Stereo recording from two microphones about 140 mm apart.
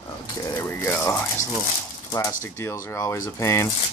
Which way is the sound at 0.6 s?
20° left (ahead or behind).